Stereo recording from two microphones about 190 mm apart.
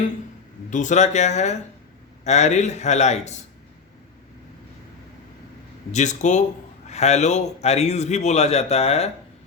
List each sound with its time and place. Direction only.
0.7 s a man's voice: 40° left (ahead or behind)
5.9 s a man's voice: 40° left (ahead or behind)